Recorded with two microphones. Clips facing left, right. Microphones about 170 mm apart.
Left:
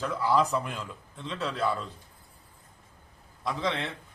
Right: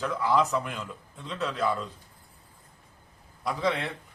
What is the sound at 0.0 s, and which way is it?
A man's voice, centre (ahead or behind).